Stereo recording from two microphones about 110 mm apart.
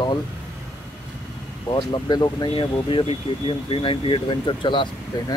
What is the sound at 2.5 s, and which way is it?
Speech, 50° left (ahead or behind).